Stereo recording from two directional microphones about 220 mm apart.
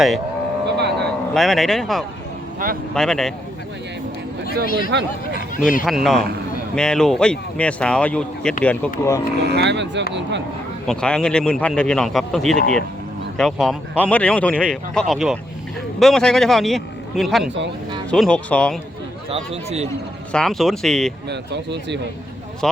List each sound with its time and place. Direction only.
0.8 s a sound: 50° right (ahead or behind)
1.3 s speech: centre (ahead or behind)
4.6 s speech: 40° left (ahead or behind)
5.8 s speech: centre (ahead or behind)
9.4 s speech: 50° right (ahead or behind)
10.8 s speech: 5° left (ahead or behind)
19.3 s speech: 30° right (ahead or behind)
20.3 s speech: centre (ahead or behind)
21.2 s speech: 50° right (ahead or behind)
22.6 s speech: centre (ahead or behind)